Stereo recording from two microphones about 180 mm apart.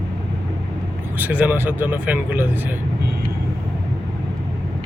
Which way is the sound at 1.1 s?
10° right (ahead or behind).